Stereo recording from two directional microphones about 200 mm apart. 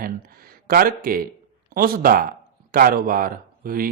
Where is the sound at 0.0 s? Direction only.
45° right (ahead or behind).